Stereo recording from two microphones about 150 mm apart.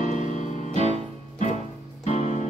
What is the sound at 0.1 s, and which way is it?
Music, 50° left (ahead or behind).